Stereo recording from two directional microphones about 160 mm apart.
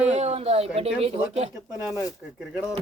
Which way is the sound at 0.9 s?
40° right (ahead or behind).